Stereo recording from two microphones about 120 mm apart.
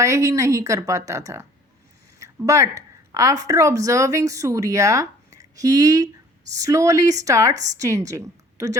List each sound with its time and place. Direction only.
0.0 s speech: 25° right (ahead or behind)
2.5 s a woman's voice: 30° right (ahead or behind)